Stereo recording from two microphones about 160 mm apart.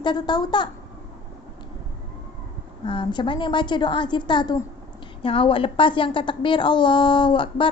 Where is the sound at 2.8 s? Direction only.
30° left (ahead or behind).